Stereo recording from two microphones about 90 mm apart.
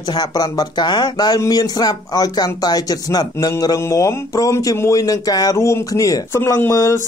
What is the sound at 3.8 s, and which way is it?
Speech, 35° left (ahead or behind).